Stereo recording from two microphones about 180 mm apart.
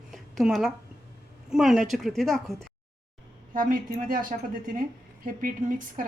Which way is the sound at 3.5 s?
50° right (ahead or behind).